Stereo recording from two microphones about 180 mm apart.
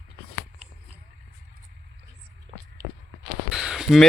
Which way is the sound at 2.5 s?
30° right (ahead or behind).